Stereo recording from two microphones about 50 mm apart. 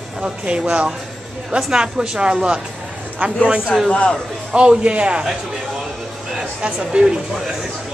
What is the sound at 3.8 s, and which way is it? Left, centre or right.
Speech, left.